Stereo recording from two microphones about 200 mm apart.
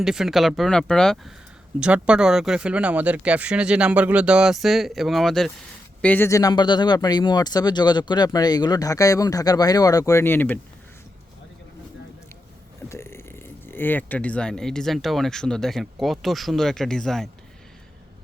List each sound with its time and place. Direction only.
0.0 s speech: centre (ahead or behind)
12.9 s speech: 10° left (ahead or behind)